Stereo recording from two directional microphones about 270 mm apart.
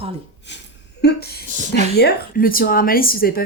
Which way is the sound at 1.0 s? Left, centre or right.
Left.